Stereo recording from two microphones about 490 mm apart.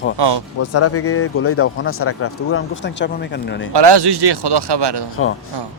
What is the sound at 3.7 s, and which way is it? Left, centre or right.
Speech, right.